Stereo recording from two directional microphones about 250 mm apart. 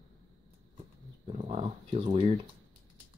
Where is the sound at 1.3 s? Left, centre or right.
Right.